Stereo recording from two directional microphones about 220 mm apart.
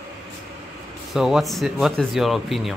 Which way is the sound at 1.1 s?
Centre (ahead or behind).